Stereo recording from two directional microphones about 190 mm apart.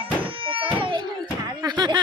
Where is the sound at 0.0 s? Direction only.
30° right (ahead or behind).